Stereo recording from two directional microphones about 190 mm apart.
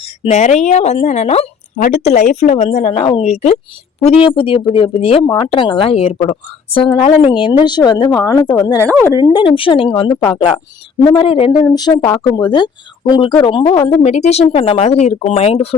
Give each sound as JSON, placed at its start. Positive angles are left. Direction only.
{"t": 0.2, "sound": "speech", "side_deg": 35}